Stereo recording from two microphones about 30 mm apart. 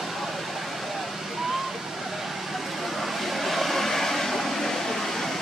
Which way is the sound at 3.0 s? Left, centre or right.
Centre.